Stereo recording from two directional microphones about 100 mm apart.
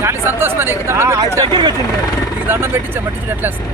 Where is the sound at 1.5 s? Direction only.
55° right (ahead or behind).